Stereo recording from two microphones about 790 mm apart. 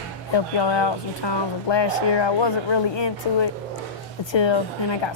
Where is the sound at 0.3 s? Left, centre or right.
Left.